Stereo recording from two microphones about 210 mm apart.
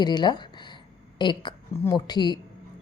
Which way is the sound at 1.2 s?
20° left (ahead or behind).